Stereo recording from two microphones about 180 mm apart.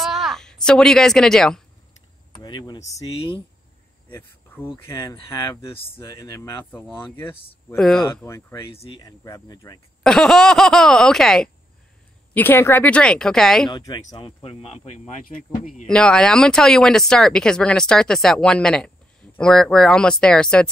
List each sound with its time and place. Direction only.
0.0 s a sound: centre (ahead or behind)
2.3 s speech: 25° left (ahead or behind)
5.9 s speech: 15° left (ahead or behind)
8.3 s speech: 15° left (ahead or behind)
9.0 s cricket: 20° left (ahead or behind)
10.0 s speech: 5° left (ahead or behind)
13.7 s cricket: 25° left (ahead or behind)
14.1 s speech: 30° left (ahead or behind)
15.9 s speech: 5° left (ahead or behind)